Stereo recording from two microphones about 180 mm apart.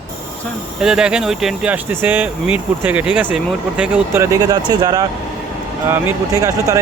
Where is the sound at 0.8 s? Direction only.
5° right (ahead or behind); by 5.1 s 20° right (ahead or behind).